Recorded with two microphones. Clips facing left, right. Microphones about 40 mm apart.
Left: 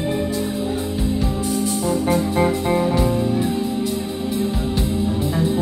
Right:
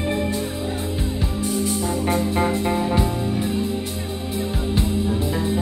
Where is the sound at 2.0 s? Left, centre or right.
Right.